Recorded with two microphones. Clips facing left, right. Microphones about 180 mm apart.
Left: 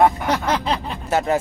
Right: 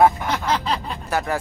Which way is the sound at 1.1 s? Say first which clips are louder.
Left 4 dB; 25° left (ahead or behind).